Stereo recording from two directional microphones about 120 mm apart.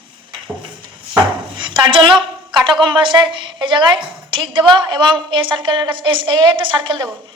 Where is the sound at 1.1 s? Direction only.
40° right (ahead or behind).